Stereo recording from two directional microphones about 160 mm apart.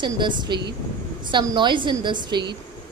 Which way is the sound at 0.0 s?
30° right (ahead or behind).